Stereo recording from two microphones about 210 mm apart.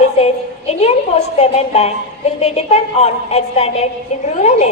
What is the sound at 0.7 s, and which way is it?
A woman's voice, 30° left (ahead or behind).